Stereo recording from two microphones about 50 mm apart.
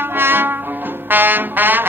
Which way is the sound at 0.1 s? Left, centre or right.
Right.